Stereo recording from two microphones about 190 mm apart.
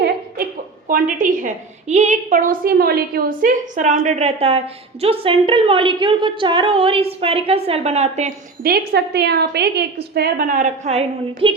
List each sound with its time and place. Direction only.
0.9 s a woman's voice: 45° right (ahead or behind)
8.6 s a woman's voice: 55° right (ahead or behind); by 11.5 s 30° right (ahead or behind)